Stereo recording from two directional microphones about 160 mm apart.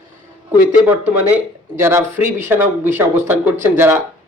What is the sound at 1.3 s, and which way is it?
A man's voice, 15° right (ahead or behind).